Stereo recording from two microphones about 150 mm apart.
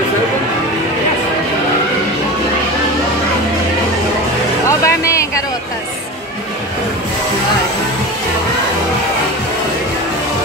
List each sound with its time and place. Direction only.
4.6 s music: 20° left (ahead or behind)